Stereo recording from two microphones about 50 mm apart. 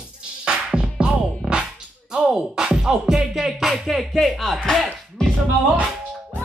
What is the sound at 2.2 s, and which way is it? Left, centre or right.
Speech, centre.